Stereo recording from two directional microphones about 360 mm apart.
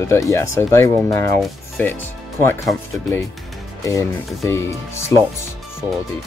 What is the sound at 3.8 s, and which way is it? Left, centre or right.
Speech, centre.